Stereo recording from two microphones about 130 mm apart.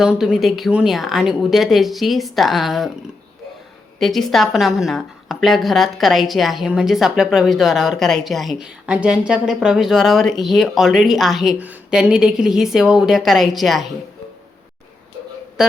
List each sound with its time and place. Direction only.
0.0 s a woman's voice: 5° right (ahead or behind)
4.0 s a woman's voice: centre (ahead or behind)